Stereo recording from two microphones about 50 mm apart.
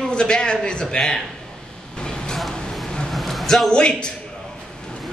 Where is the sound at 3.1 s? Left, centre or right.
Centre.